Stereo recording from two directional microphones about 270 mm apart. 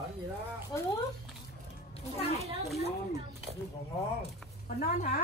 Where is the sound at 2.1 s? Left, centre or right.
Left.